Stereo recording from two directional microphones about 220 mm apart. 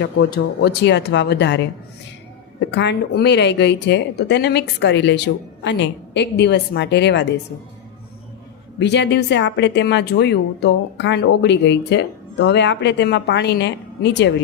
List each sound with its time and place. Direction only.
0.0 s speech: 50° left (ahead or behind)
8.8 s speech: 55° left (ahead or behind)